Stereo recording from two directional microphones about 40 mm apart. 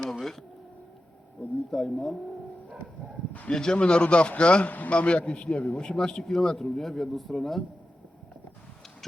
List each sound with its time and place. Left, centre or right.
0.0 s a sound: centre
1.7 s speech: centre
3.5 s speech: centre
5.5 s speech: centre
6.3 s speech: centre